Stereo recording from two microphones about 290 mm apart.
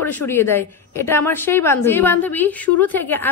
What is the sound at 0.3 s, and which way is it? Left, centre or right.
A woman's voice, centre.